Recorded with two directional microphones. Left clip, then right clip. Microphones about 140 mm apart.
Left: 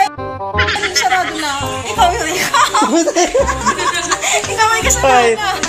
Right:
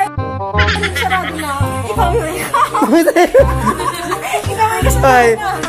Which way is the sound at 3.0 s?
65° right (ahead or behind).